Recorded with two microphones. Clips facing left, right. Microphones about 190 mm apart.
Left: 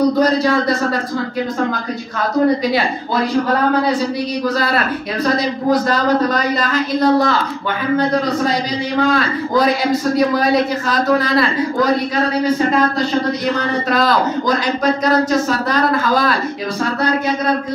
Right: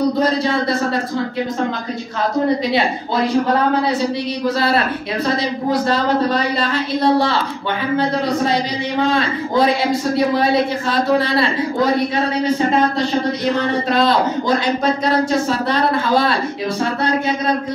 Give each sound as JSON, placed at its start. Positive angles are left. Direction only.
{"t": 0.2, "sound": "a man's voice", "side_deg": -25}
{"t": 4.6, "sound": "a man's voice", "side_deg": -25}
{"t": 9.0, "sound": "a man's voice", "side_deg": -25}
{"t": 15.7, "sound": "a man's voice", "side_deg": -25}